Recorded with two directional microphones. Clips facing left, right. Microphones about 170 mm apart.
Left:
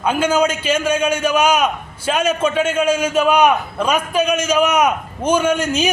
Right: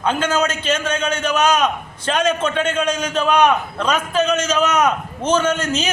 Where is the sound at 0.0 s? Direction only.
10° left (ahead or behind).